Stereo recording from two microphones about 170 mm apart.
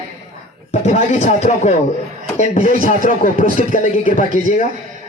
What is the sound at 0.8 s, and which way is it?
A man's voice, 40° left (ahead or behind).